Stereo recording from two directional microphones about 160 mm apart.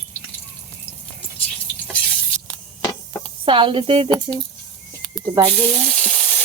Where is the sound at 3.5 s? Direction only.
30° right (ahead or behind).